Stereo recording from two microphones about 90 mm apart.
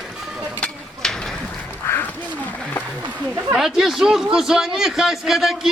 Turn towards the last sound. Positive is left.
turn(degrees=-5)  # may be behind; listen again after turning